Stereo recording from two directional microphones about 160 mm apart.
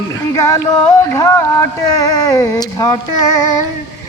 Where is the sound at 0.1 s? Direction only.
20° left (ahead or behind).